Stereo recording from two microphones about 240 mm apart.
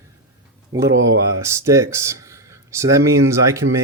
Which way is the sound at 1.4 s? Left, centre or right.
Centre.